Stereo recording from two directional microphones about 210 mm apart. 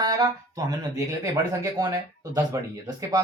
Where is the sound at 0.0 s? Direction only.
20° right (ahead or behind).